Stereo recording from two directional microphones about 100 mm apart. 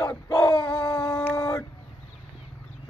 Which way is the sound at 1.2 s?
30° left (ahead or behind).